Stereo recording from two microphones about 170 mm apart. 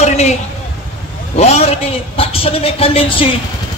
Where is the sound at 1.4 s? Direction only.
40° left (ahead or behind).